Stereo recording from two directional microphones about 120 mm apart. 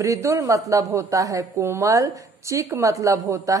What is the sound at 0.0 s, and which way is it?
Speech, 25° right (ahead or behind).